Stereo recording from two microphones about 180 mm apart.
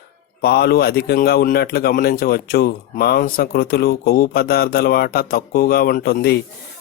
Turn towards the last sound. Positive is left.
turn(degrees=65)  # may be behind; listen again after turning